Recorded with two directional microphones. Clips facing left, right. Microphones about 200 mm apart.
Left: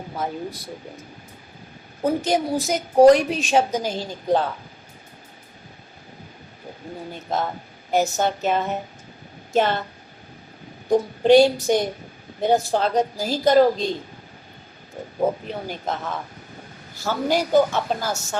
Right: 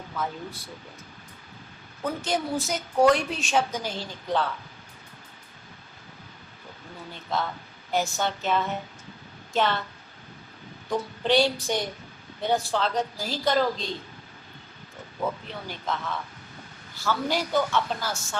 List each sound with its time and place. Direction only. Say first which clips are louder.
0.1 s speech: left 3 dB; 40° left (ahead or behind)
2.0 s a woman's voice: left 7 dB; 40° left (ahead or behind)
2.6 s a woman's voice: left 7 dB; 55° left (ahead or behind)
3.5 s speech: left 5 dB; 40° left (ahead or behind)
6.9 s speech: left 4 dB; 45° left (ahead or behind)
10.8 s speech: left 10 dB; 45° left (ahead or behind)
15.2 s a man's voice: left 8 dB; 45° left (ahead or behind)